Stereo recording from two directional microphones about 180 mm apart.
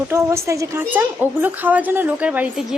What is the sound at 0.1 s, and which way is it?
A woman's voice, 15° right (ahead or behind).